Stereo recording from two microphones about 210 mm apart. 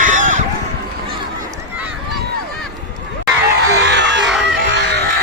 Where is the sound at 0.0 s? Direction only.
35° right (ahead or behind).